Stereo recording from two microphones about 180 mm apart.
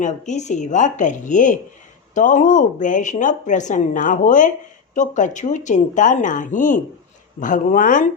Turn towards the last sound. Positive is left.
turn(degrees=45)  # may be behind; listen again after turning